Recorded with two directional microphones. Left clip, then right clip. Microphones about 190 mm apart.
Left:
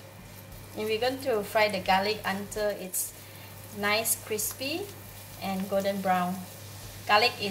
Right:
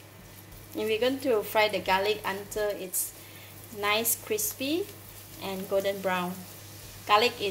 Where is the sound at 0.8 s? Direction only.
45° right (ahead or behind).